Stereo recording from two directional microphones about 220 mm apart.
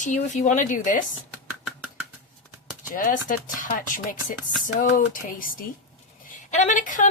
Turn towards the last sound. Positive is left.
turn(degrees=35)  # may be behind; listen again after turning